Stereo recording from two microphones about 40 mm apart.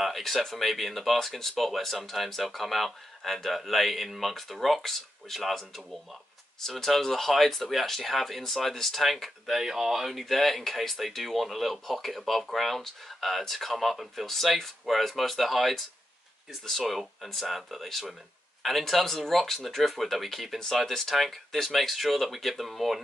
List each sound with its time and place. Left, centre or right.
0.0 s speech: centre
10.2 s speech: centre